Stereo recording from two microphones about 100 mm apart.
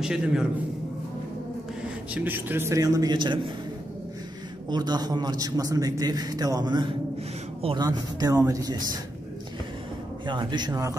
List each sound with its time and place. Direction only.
0.0 s a man's voice: 5° right (ahead or behind)
2.1 s a man's voice: 20° right (ahead or behind)
2.8 s a man's voice: 40° right (ahead or behind)
4.6 s a man's voice: 45° right (ahead or behind)
10.2 s a man's voice: 50° right (ahead or behind)